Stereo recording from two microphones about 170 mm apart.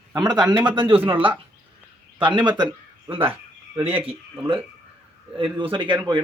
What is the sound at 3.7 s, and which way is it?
Speech, 10° right (ahead or behind).